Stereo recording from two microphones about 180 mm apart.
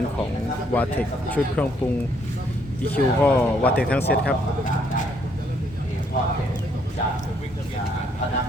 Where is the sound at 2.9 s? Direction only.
5° left (ahead or behind).